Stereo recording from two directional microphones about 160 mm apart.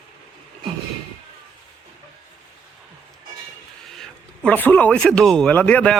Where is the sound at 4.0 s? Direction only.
10° left (ahead or behind).